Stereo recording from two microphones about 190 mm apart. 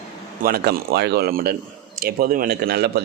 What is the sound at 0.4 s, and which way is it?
Speech, 55° right (ahead or behind).